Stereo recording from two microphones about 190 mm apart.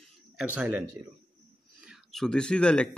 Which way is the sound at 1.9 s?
Centre (ahead or behind).